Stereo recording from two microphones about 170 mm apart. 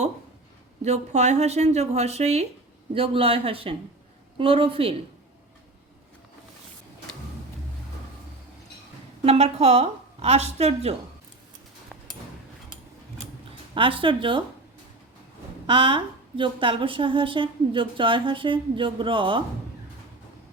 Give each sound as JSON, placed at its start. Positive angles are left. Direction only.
{"t": 0.9, "sound": "a woman's voice", "side_deg": -40}
{"t": 9.2, "sound": "a woman's voice", "side_deg": -40}
{"t": 13.7, "sound": "a woman's voice", "side_deg": -30}
{"t": 15.6, "sound": "a woman's voice", "side_deg": -30}